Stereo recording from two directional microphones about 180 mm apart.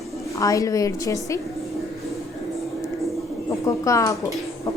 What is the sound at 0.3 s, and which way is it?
A woman's voice, 20° left (ahead or behind).